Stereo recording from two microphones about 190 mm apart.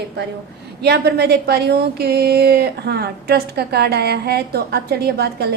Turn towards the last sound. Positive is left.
turn(degrees=-55)  # may be behind; listen again after turning